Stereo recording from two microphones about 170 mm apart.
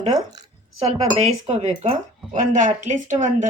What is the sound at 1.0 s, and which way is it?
A woman's voice, 40° right (ahead or behind).